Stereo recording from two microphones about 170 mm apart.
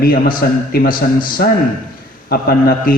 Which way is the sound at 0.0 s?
60° left (ahead or behind).